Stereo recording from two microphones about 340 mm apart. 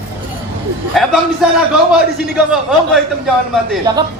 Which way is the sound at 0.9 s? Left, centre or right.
Centre.